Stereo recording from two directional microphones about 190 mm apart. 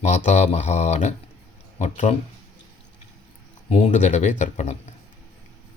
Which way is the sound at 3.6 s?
35° left (ahead or behind).